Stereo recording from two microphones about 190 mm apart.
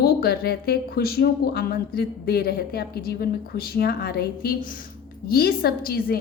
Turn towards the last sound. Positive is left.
turn(degrees=55)  # may be behind; listen again after turning